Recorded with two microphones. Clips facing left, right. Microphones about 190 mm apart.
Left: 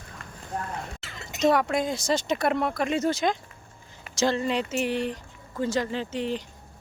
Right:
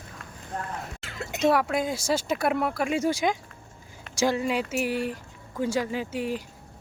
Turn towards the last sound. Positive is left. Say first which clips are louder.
# even
turn(degrees=-10)  # may be behind; listen again after turning